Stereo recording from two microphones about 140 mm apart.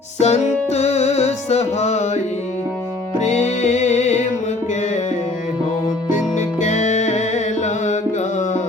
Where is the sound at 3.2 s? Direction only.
55° left (ahead or behind).